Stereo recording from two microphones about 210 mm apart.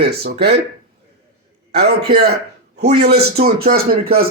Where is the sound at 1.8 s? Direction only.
50° right (ahead or behind).